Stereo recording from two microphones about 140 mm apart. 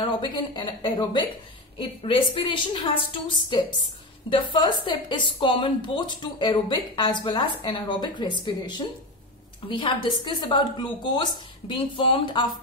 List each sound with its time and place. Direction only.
0.0 s a woman's voice: 35° left (ahead or behind)